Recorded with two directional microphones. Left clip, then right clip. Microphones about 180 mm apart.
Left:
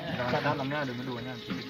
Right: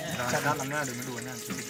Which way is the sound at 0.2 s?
10° right (ahead or behind).